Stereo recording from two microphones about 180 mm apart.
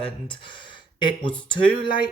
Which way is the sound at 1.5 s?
25° left (ahead or behind).